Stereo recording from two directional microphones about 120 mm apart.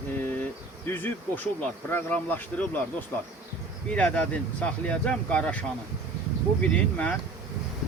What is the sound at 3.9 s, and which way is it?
Speech, 10° left (ahead or behind).